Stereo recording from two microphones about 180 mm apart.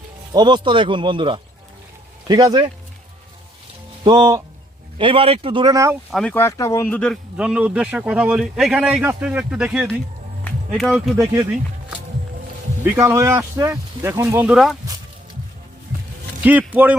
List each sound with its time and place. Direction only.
0.3 s speech: 25° right (ahead or behind)
4.0 s speech: 25° right (ahead or behind)
6.1 s speech: 5° left (ahead or behind)
7.3 s speech: 5° right (ahead or behind)
10.4 s music: centre (ahead or behind)
12.8 s speech: 15° right (ahead or behind)
14.5 s speech: centre (ahead or behind)
16.4 s speech: 10° right (ahead or behind)